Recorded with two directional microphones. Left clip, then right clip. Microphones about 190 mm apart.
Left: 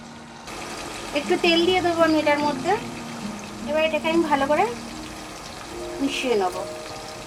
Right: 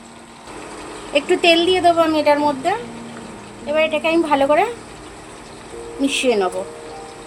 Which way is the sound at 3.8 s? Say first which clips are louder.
Right 4 dB; 65° right (ahead or behind).